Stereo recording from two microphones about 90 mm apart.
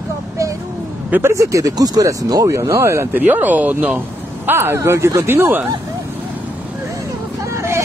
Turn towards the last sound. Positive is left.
turn(degrees=-30)  # may be behind; listen again after turning